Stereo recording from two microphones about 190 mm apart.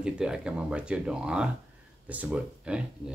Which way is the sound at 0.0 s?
5° right (ahead or behind).